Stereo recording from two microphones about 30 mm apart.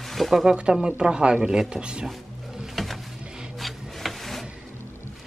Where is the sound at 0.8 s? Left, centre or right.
Right.